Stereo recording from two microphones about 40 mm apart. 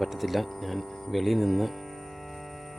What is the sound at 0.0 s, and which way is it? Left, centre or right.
Speech, centre.